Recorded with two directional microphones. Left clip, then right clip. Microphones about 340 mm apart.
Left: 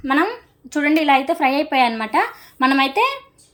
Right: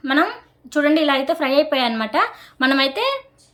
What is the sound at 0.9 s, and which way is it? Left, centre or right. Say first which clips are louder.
Speech: left 4 dB; centre.